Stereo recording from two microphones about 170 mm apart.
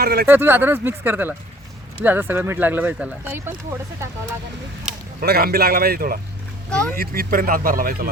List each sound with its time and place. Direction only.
0.0 s speech: 65° right (ahead or behind)
0.3 s speech: 10° right (ahead or behind)
5.2 s speech: 65° right (ahead or behind)
6.7 s speech: 5° left (ahead or behind)
6.9 s speech: 60° right (ahead or behind)